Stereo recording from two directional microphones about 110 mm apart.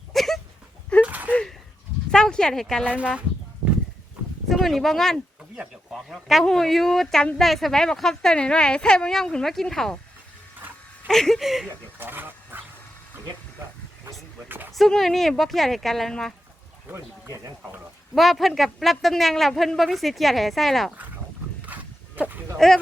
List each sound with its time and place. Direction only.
0.1 s dog: centre (ahead or behind)
1.0 s a sound: 15° right (ahead or behind)
1.3 s a sound: 10° left (ahead or behind)
2.0 s speech: 5° left (ahead or behind)
2.9 s speech: 10° right (ahead or behind)
4.4 s a man's voice: centre (ahead or behind)
11.1 s a man's voice: 5° left (ahead or behind)
11.9 s a sound: 20° right (ahead or behind)
14.4 s speech: 15° right (ahead or behind)
14.7 s a man's voice: centre (ahead or behind)
16.9 s a sound: 30° right (ahead or behind)
18.1 s a man's voice: centre (ahead or behind)
21.7 s horse: 15° right (ahead or behind)
22.5 s a man's voice: 5° left (ahead or behind)